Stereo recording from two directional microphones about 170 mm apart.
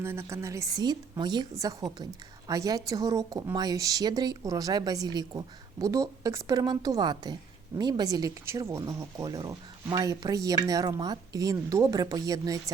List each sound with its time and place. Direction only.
0.0 s speech: 15° right (ahead or behind)